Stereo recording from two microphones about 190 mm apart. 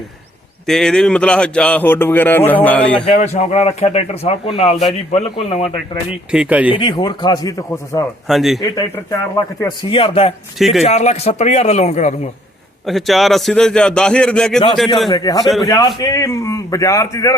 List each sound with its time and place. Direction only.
0.7 s speech: 5° left (ahead or behind)
3.1 s speech: 35° left (ahead or behind)
6.1 s speech: 5° right (ahead or behind)
6.7 s a man's voice: 25° left (ahead or behind)
8.3 s a man's voice: centre (ahead or behind)
8.6 s a man's voice: 20° left (ahead or behind)
10.6 s a man's voice: centre (ahead or behind)
10.8 s speech: 35° left (ahead or behind)
12.8 s a man's voice: centre (ahead or behind)
15.1 s a man's voice: 20° left (ahead or behind)